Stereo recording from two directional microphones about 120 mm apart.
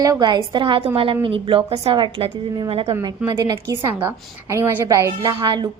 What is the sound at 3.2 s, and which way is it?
Speech, 35° right (ahead or behind).